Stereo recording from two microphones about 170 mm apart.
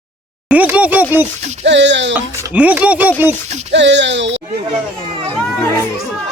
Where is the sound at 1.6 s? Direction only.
90° right.